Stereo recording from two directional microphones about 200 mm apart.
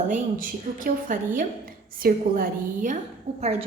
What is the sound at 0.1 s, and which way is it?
A woman's voice, 45° right (ahead or behind).